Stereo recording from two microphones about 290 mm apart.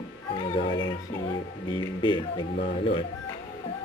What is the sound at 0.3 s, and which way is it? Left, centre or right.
Speech, centre.